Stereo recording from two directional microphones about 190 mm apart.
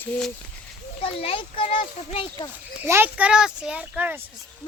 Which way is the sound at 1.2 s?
30° left (ahead or behind).